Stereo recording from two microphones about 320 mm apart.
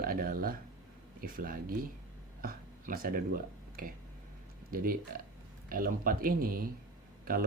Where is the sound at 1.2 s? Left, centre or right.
Right.